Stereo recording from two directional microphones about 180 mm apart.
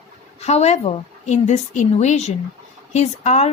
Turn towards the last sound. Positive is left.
turn(degrees=35)  # may be behind; listen again after turning